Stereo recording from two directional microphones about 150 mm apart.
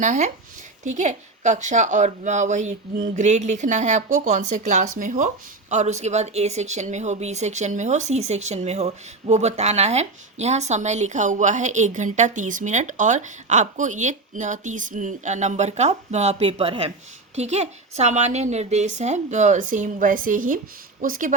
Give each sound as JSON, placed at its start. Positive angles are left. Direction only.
{"t": 0.0, "sound": "speech", "side_deg": -55}